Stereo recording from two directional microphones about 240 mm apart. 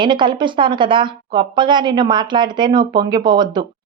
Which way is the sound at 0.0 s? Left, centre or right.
Centre.